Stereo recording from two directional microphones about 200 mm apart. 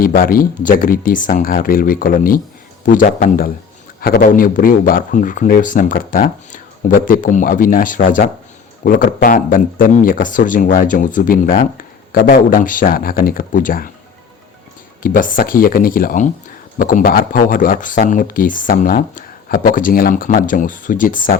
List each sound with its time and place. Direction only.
0.0 s speech: 45° left (ahead or behind)
15.0 s speech: 40° left (ahead or behind)